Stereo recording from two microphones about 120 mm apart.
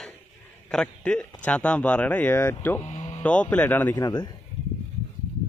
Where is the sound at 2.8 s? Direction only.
60° left (ahead or behind).